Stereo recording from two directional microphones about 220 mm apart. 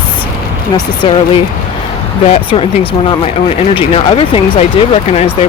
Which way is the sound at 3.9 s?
25° left (ahead or behind).